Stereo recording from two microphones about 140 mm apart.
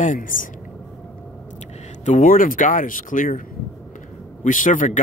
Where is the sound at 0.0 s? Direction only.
70° left (ahead or behind).